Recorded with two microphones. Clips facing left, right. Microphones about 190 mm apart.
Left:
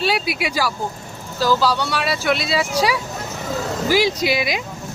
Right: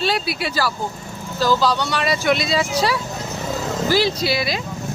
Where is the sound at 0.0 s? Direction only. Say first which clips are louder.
Left 1 dB; 10° left (ahead or behind).